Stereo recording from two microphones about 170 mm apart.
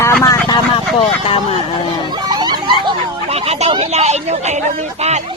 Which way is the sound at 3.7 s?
40° right (ahead or behind).